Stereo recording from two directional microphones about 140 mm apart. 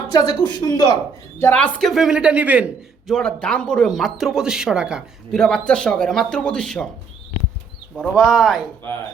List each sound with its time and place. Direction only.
0.1 s speech: 30° left (ahead or behind)
1.4 s speech: 10° left (ahead or behind); by 2.7 s 10° right (ahead or behind)
3.1 s speech: 5° left (ahead or behind)
7.9 s speech: 5° left (ahead or behind)